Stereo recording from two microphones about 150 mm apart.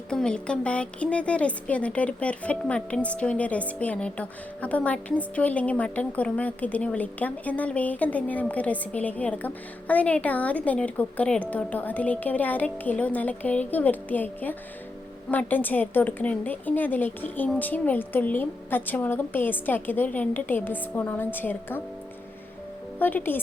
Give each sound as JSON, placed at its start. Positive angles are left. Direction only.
{"t": 0.1, "sound": "a woman's voice", "side_deg": 5}
{"t": 23.0, "sound": "a woman's voice", "side_deg": 10}